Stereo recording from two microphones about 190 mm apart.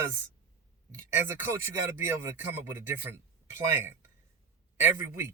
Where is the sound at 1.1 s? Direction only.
10° right (ahead or behind).